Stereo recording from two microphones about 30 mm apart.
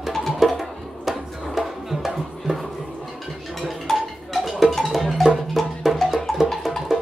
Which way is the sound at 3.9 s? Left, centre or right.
Centre.